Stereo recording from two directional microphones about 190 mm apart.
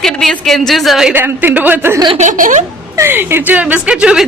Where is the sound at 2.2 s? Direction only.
40° right (ahead or behind).